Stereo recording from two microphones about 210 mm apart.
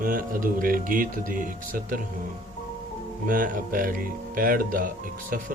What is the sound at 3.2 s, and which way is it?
Speech, 40° right (ahead or behind).